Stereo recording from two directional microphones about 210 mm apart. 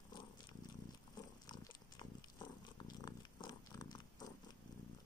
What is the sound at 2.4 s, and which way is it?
Purr, 20° left (ahead or behind).